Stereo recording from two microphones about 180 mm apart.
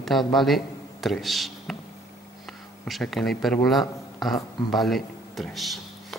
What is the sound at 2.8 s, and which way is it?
A man's voice, centre (ahead or behind).